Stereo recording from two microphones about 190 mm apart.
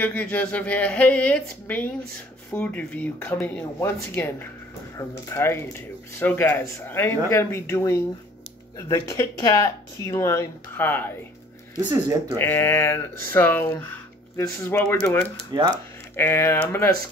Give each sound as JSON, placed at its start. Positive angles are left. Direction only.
{"t": 0.0, "sound": "speech", "side_deg": 10}
{"t": 11.9, "sound": "speech", "side_deg": -15}
{"t": 12.4, "sound": "speech", "side_deg": 10}
{"t": 15.5, "sound": "speech", "side_deg": -25}
{"t": 16.2, "sound": "speech", "side_deg": 10}